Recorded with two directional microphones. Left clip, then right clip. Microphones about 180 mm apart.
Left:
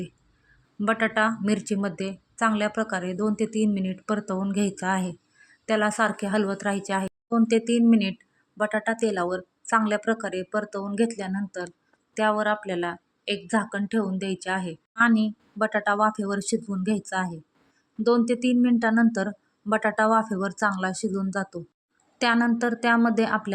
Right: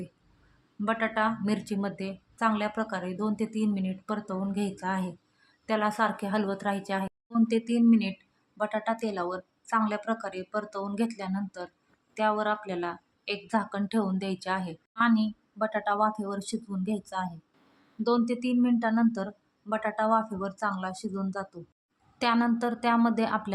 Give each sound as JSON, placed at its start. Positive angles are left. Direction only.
{"t": 0.9, "sound": "a woman's voice", "side_deg": 25}